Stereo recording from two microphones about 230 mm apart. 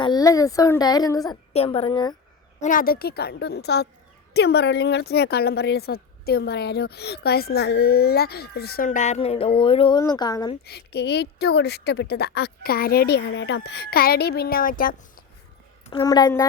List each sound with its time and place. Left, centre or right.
0.0 s a woman's voice: centre
2.6 s speech: left; by 10.6 s centre
10.7 s speech: left
15.9 s speech: centre